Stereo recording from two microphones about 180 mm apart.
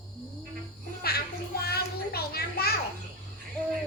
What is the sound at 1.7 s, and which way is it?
Children playing, 60° left (ahead or behind).